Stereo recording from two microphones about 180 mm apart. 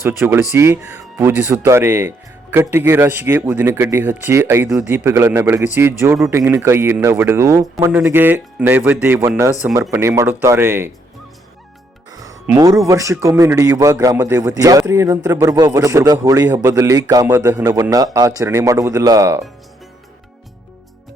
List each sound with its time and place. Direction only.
0.0 s speech: 15° right (ahead or behind)
12.1 s music: 20° right (ahead or behind)
12.5 s a man's voice: 20° right (ahead or behind)